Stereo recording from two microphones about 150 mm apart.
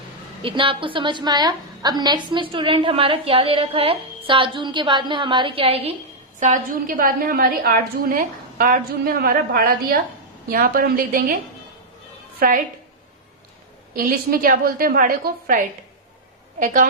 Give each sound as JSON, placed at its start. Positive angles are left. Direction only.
{"t": 0.4, "sound": "a woman's voice", "side_deg": -35}
{"t": 6.4, "sound": "a woman's voice", "side_deg": -60}
{"t": 12.4, "sound": "a woman's voice", "side_deg": -65}
{"t": 13.9, "sound": "a woman's voice", "side_deg": -70}